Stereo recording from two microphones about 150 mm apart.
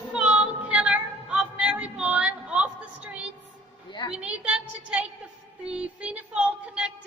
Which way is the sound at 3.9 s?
30° left (ahead or behind).